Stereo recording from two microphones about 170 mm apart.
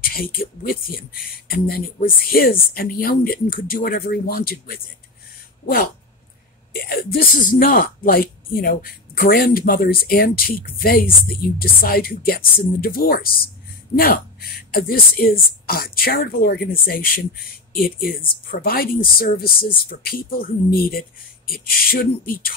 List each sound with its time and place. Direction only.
0.0 s speech: 60° left (ahead or behind)
6.7 s speech: 60° left (ahead or behind)